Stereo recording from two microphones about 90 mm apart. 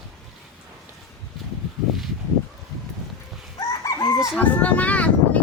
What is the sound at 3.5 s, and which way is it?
Chicken, 45° left (ahead or behind).